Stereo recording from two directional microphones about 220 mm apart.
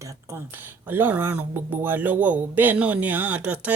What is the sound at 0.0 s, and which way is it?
Speech, 15° right (ahead or behind).